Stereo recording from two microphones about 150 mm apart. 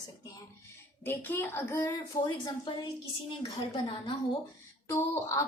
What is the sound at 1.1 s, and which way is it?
A child's voice, 15° left (ahead or behind).